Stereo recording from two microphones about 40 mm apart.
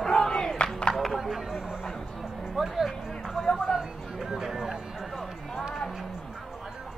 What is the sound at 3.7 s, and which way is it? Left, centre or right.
Music, centre.